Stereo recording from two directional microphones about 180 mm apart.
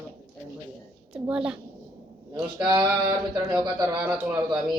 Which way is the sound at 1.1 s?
5° right (ahead or behind).